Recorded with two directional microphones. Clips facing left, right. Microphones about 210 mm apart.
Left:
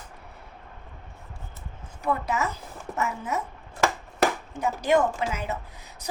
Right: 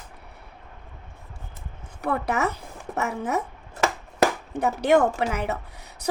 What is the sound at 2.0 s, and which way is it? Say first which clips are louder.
A woman's voice: right 2 dB; 65° right (ahead or behind).